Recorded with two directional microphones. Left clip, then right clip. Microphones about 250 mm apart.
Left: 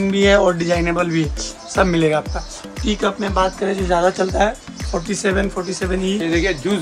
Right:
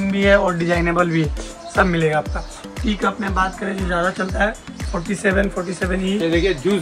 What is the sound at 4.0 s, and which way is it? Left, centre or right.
A man's voice, centre.